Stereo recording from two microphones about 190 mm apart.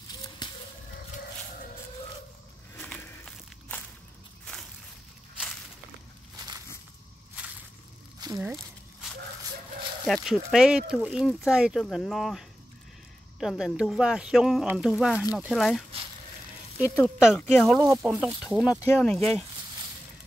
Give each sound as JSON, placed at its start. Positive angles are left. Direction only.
{"t": 2.7, "sound": "a sound", "side_deg": 10}
{"t": 6.3, "sound": "a sound", "side_deg": -20}
{"t": 8.2, "sound": "crumpling", "side_deg": -20}
{"t": 10.0, "sound": "speech", "side_deg": 0}
{"t": 17.0, "sound": "speech", "side_deg": 0}
{"t": 18.7, "sound": "speech", "side_deg": 10}